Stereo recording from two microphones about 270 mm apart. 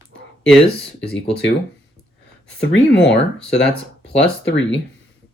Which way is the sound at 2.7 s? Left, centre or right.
Left.